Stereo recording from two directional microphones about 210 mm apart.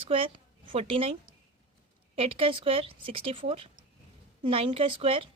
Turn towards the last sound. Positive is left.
turn(degrees=-25)  # may be behind; listen again after turning